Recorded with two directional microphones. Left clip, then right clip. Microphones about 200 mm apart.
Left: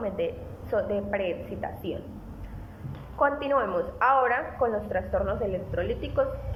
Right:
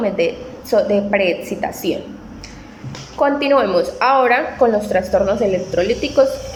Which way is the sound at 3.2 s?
10° right (ahead or behind).